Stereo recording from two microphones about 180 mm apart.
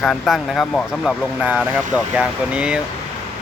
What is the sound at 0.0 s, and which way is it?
Speech, centre (ahead or behind).